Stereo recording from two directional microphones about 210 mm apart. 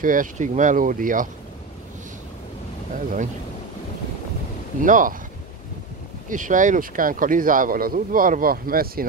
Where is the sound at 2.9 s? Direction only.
40° right (ahead or behind).